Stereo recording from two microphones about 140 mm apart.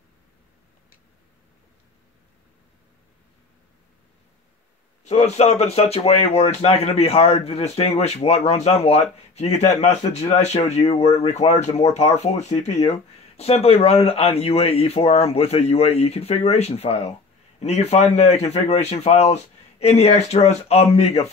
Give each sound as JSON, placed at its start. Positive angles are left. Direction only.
{"t": 5.0, "sound": "speech", "side_deg": 50}